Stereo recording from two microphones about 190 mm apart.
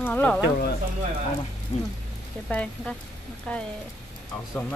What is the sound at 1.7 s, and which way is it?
Speech, 30° left (ahead or behind).